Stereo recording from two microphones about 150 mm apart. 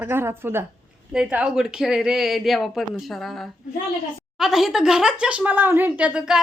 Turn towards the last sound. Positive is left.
turn(degrees=-5)  # may be behind; listen again after turning